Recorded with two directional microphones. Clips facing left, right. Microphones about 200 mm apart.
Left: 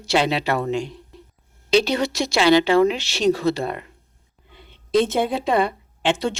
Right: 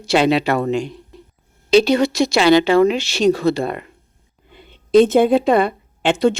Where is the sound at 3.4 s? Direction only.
55° right (ahead or behind).